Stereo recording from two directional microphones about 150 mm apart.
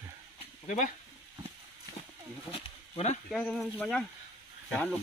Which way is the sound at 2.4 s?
40° left (ahead or behind).